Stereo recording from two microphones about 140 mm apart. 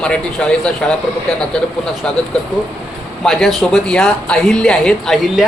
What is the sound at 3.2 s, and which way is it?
Speech, centre (ahead or behind).